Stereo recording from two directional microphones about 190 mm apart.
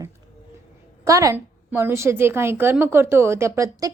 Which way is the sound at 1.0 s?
15° right (ahead or behind).